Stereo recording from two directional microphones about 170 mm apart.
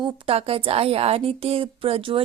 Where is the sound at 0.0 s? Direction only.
35° right (ahead or behind).